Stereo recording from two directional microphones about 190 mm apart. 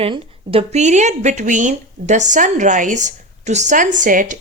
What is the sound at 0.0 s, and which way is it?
Speech, 30° right (ahead or behind).